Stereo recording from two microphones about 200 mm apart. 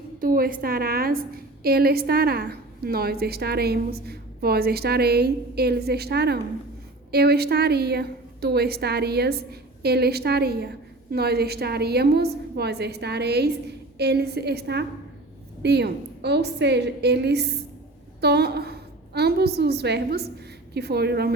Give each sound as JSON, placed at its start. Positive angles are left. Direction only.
{"t": 0.2, "sound": "a woman's voice", "side_deg": -45}